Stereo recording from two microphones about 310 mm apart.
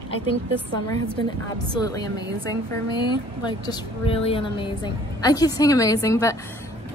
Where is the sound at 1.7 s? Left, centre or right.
Centre.